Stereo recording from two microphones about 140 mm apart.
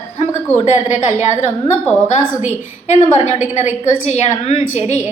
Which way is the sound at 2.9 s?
55° left (ahead or behind).